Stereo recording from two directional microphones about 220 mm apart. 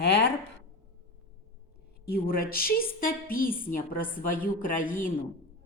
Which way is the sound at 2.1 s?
40° left (ahead or behind).